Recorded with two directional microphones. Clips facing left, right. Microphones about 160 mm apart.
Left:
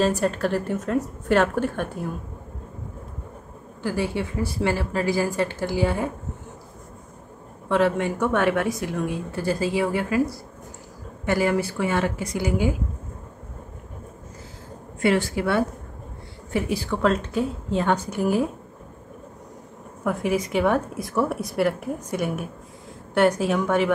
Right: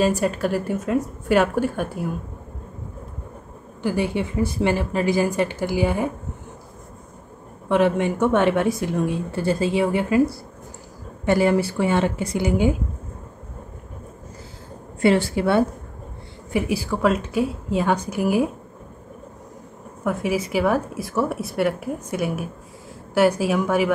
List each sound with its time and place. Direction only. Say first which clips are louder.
0.0 s a woman's voice: right 1 dB; 10° right (ahead or behind)
3.8 s a woman's voice: right 3 dB; 20° right (ahead or behind)
7.6 s a woman's voice: right 2 dB; 20° right (ahead or behind)
15.0 s a woman's voice: right 3 dB; 30° right (ahead or behind)
16.5 s a woman's voice: right 2 dB; 10° right (ahead or behind)
20.0 s a woman's voice: right 1 dB; centre (ahead or behind)